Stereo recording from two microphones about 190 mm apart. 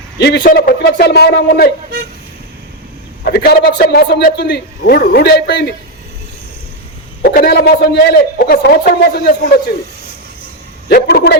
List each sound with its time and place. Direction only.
0.2 s a man's voice: 55° left (ahead or behind)
3.2 s a man's voice: 55° left (ahead or behind)
7.2 s a man's voice: 50° left (ahead or behind)
10.8 s a man's voice: 55° left (ahead or behind)